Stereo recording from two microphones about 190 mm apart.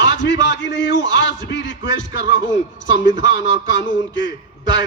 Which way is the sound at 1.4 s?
70° left (ahead or behind).